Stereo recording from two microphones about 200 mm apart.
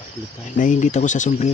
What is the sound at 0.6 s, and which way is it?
Speech, 40° left (ahead or behind).